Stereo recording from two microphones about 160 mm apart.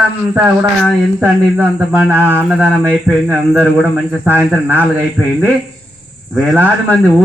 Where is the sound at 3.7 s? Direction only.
10° right (ahead or behind).